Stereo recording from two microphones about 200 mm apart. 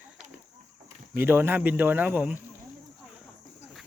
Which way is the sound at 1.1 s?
10° right (ahead or behind).